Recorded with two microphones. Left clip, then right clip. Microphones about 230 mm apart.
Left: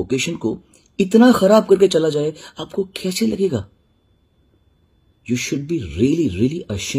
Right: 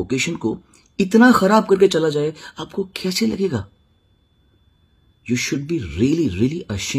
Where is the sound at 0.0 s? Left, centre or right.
Centre.